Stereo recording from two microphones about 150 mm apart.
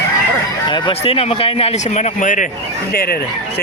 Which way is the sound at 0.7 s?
40° left (ahead or behind).